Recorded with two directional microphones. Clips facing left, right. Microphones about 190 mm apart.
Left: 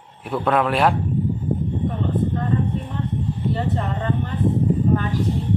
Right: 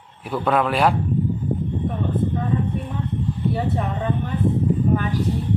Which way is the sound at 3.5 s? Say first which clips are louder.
Even; 10° right (ahead or behind).